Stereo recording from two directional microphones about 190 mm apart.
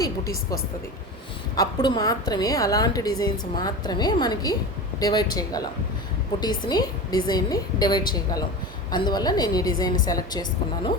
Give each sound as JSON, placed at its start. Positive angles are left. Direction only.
{"t": 1.5, "sound": "a woman's voice", "side_deg": 20}